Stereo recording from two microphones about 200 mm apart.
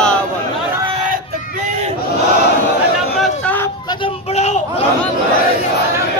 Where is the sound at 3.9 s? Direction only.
30° left (ahead or behind).